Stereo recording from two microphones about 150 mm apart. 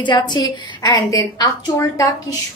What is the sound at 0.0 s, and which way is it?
A woman's voice, 30° left (ahead or behind).